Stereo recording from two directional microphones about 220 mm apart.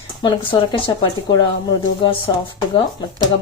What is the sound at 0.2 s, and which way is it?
Speech, 20° left (ahead or behind).